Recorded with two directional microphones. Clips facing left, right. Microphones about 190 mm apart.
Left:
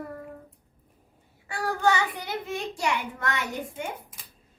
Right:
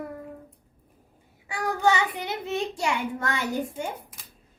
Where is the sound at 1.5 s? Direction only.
15° right (ahead or behind).